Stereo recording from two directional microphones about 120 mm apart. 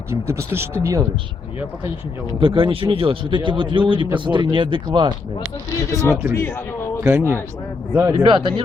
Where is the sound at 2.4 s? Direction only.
45° right (ahead or behind).